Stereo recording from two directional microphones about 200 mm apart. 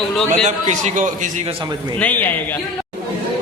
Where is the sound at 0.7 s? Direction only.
40° right (ahead or behind).